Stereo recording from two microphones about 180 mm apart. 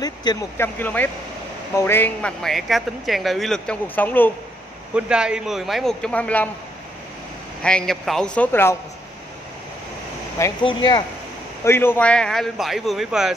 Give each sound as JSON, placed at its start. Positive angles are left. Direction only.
{"t": 0.0, "sound": "a man's voice", "side_deg": 20}
{"t": 4.9, "sound": "a man's voice", "side_deg": -5}
{"t": 7.6, "sound": "a man's voice", "side_deg": 5}
{"t": 10.6, "sound": "speech", "side_deg": 25}
{"t": 11.6, "sound": "a man's voice", "side_deg": 10}